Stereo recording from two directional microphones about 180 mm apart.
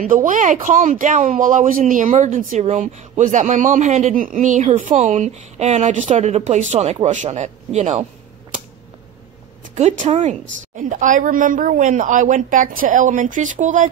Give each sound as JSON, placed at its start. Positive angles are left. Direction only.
{"t": 0.0, "sound": "speech", "side_deg": -45}
{"t": 9.8, "sound": "speech", "side_deg": -40}